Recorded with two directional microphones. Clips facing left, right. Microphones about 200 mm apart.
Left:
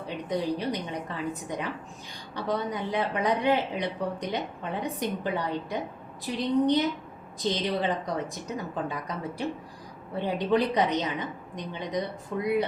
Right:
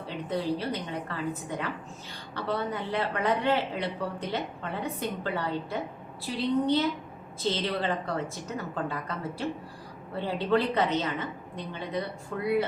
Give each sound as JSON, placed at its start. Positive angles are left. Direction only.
{"t": 0.3, "sound": "speech", "side_deg": 15}
{"t": 10.2, "sound": "speech", "side_deg": 15}